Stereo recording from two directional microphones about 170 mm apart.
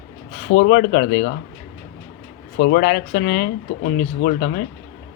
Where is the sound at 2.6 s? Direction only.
60° left (ahead or behind).